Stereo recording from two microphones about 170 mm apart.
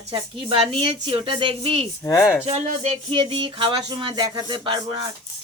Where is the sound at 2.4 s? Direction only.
40° right (ahead or behind).